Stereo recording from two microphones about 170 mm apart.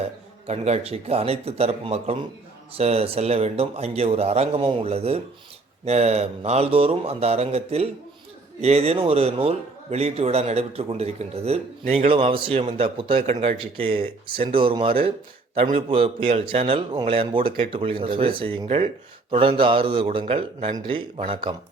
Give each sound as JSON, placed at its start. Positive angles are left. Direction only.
{"t": 0.4, "sound": "a man's voice", "side_deg": -40}
{"t": 13.2, "sound": "speech", "side_deg": -45}
{"t": 13.6, "sound": "a man's voice", "side_deg": -35}